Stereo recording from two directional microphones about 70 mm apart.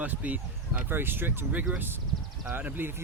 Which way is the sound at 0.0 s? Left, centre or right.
Right.